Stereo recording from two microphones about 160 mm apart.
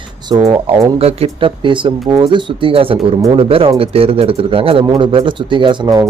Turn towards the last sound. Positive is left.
turn(degrees=-25)  # may be behind; listen again after turning